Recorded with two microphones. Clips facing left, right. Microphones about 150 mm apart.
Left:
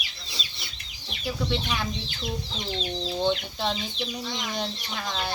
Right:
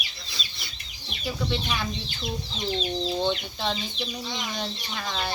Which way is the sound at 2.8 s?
10° right (ahead or behind).